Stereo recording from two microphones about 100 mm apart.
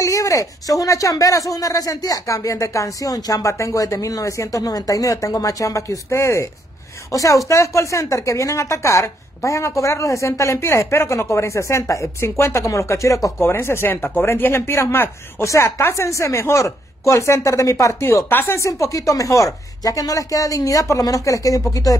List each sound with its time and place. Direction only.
0.0 s speech: 30° left (ahead or behind)